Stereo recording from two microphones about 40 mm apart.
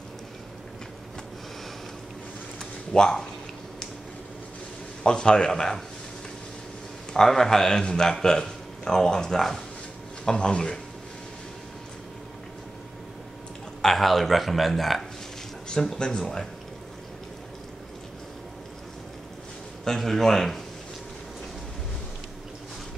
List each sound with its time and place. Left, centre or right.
2.6 s a sound: centre
5.0 s speech: left
7.2 s speech: centre
13.8 s speech: centre
15.7 s speech: centre
19.8 s speech: centre